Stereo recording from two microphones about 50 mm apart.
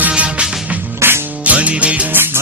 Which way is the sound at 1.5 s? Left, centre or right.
Right.